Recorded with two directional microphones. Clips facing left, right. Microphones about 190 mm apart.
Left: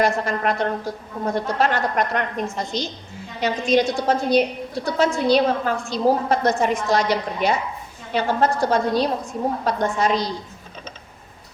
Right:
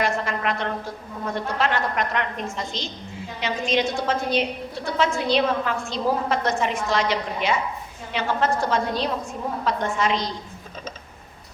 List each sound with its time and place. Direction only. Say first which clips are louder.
0.0 s a woman's voice: left 4 dB; 40° left (ahead or behind)